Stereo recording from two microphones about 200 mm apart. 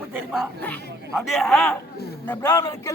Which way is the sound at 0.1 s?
5° right (ahead or behind).